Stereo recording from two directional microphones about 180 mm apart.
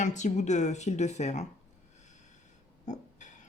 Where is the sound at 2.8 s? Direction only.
40° left (ahead or behind).